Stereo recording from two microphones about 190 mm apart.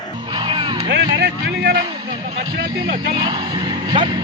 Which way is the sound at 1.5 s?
60° right (ahead or behind).